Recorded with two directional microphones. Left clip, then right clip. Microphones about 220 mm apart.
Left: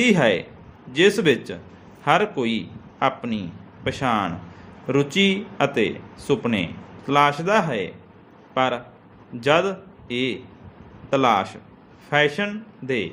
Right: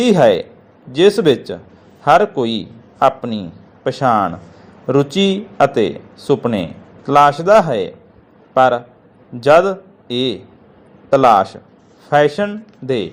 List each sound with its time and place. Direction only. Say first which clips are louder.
0.0 s a man's voice: right 7 dB; 20° right (ahead or behind)